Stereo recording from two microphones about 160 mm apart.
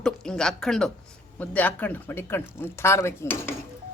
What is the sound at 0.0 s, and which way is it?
A woman's voice, 5° left (ahead or behind).